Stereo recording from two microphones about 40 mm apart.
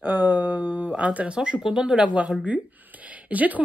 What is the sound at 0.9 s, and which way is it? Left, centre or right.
Speech, right.